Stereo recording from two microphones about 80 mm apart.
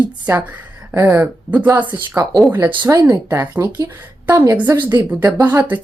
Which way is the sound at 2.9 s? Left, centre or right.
Right.